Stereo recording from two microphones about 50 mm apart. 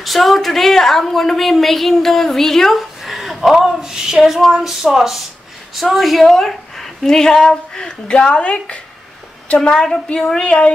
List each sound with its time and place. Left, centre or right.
0.0 s a woman's voice: centre; by 8.8 s left
9.6 s a woman's voice: centre
10.3 s speech: centre